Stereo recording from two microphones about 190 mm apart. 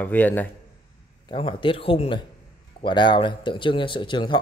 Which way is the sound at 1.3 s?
25° left (ahead or behind).